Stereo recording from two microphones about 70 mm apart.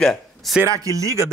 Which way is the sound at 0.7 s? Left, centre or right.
Right.